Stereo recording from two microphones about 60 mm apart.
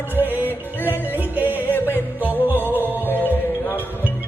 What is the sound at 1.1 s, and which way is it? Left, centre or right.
Music, right.